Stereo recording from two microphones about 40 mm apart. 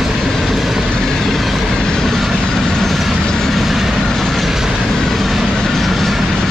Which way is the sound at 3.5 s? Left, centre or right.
Centre.